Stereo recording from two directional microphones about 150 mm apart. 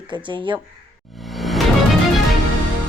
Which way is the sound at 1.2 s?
Centre (ahead or behind).